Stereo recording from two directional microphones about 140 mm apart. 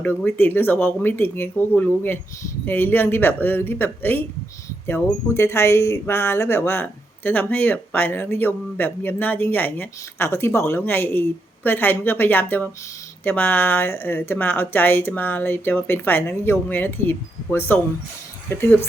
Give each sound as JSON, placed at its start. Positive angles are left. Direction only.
{"t": 0.0, "sound": "speech", "side_deg": 15}